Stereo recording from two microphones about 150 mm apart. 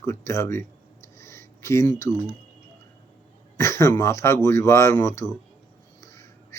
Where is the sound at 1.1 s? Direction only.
20° left (ahead or behind).